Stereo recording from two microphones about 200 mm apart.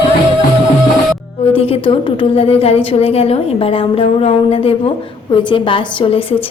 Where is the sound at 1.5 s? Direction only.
30° left (ahead or behind).